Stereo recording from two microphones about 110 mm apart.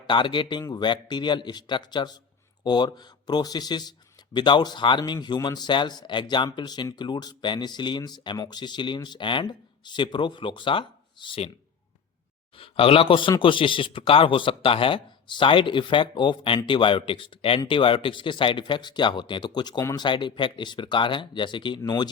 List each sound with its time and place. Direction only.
0.1 s speech: 50° left (ahead or behind)
12.5 s speech: 55° left (ahead or behind); by 22.1 s 40° left (ahead or behind)